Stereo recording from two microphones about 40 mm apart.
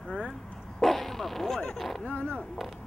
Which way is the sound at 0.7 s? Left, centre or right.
Centre.